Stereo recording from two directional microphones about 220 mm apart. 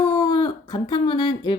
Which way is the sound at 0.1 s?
15° left (ahead or behind).